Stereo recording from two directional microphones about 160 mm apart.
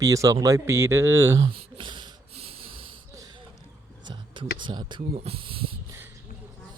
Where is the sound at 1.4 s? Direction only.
35° right (ahead or behind).